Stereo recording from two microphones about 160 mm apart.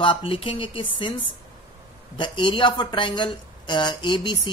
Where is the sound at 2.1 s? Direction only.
30° left (ahead or behind).